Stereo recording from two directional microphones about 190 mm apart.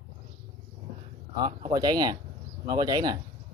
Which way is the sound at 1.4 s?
25° right (ahead or behind).